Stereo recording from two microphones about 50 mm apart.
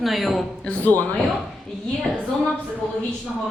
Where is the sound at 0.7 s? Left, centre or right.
Left.